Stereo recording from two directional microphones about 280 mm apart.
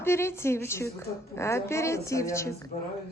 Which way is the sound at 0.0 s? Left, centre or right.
Centre.